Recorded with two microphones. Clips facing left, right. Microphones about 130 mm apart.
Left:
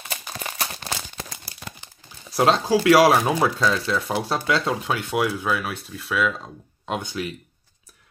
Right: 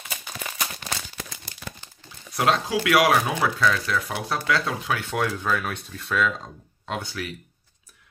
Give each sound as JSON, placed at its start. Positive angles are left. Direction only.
{"t": 0.3, "sound": "a sound", "side_deg": 35}
{"t": 2.3, "sound": "speech", "side_deg": 30}
{"t": 5.1, "sound": "speech", "side_deg": 10}
{"t": 6.9, "sound": "speech", "side_deg": 20}